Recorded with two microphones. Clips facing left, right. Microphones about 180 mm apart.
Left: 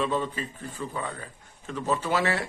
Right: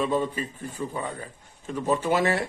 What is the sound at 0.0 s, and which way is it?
A man's voice, 15° right (ahead or behind).